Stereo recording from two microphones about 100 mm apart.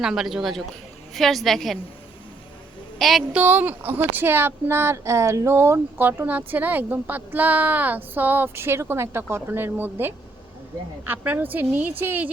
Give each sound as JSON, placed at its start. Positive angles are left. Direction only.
{"t": 0.0, "sound": "a woman's voice", "side_deg": -5}
{"t": 3.0, "sound": "a woman's voice", "side_deg": 0}
{"t": 3.3, "sound": "speech", "side_deg": -20}